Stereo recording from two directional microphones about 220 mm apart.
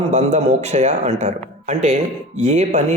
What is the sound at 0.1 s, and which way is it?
Speech, 30° right (ahead or behind).